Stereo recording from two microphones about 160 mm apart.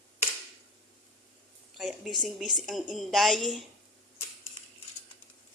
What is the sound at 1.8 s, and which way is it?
A woman's voice, centre (ahead or behind).